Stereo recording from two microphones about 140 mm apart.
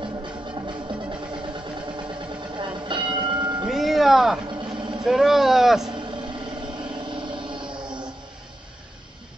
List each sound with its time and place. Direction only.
2.5 s train: 35° right (ahead or behind)
3.6 s vehicle: centre (ahead or behind)
7.2 s music: 35° right (ahead or behind)